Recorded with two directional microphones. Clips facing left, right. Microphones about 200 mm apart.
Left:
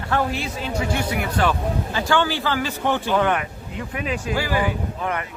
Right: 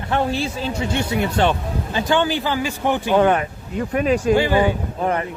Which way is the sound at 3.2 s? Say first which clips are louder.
Right 5 dB; 35° right (ahead or behind).